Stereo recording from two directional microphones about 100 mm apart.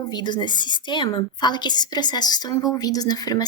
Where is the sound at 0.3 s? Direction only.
50° left (ahead or behind).